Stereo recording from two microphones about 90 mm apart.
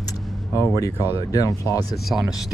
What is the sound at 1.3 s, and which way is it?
Speech, 40° left (ahead or behind).